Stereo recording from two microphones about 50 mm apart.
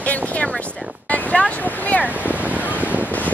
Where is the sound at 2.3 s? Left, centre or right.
Right.